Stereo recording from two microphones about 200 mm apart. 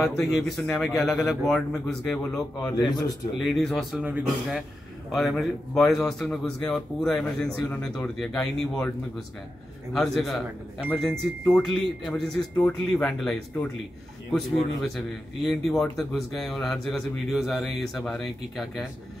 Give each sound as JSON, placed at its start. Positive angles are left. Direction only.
{"t": 0.0, "sound": "a man's voice", "side_deg": 0}
{"t": 2.9, "sound": "a man's voice", "side_deg": 20}
{"t": 3.3, "sound": "a man's voice", "side_deg": 0}
{"t": 9.9, "sound": "a man's voice", "side_deg": 0}